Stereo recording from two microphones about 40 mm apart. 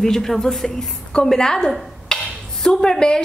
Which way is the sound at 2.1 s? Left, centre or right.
Centre.